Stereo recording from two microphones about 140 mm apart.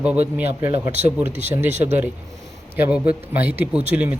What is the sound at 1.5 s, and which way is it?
Speech, 15° right (ahead or behind).